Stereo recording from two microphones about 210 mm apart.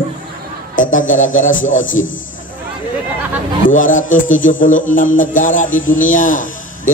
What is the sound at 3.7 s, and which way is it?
A man's voice, 40° left (ahead or behind).